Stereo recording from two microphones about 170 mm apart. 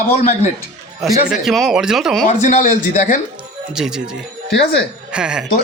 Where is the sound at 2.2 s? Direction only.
50° left (ahead or behind).